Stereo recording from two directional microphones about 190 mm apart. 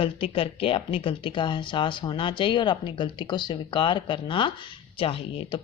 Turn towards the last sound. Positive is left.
turn(degrees=30)  # may be behind; listen again after turning